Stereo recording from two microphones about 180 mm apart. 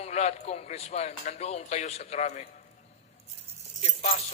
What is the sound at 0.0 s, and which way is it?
Speech, 35° left (ahead or behind).